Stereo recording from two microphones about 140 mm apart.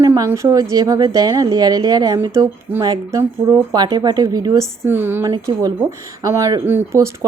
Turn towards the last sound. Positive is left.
turn(degrees=-20)  # may be behind; listen again after turning